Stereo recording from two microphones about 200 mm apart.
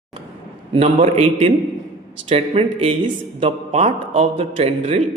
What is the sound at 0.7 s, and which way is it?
A man's voice, 30° right (ahead or behind).